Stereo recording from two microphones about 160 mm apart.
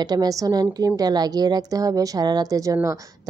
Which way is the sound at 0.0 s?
25° right (ahead or behind).